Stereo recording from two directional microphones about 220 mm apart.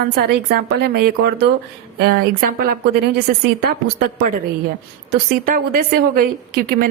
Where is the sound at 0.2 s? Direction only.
45° right (ahead or behind).